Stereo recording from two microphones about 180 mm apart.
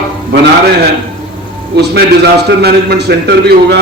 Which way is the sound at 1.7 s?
65° right (ahead or behind).